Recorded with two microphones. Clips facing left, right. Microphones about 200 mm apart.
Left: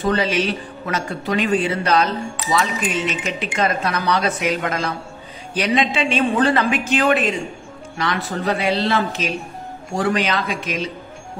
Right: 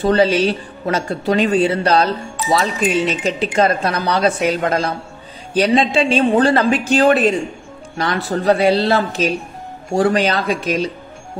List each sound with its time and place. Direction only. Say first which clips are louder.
0.0 s speech: right 5 dB; 30° right (ahead or behind)